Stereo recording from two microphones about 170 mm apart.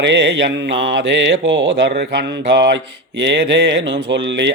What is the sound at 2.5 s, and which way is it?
Mantra, 90° right.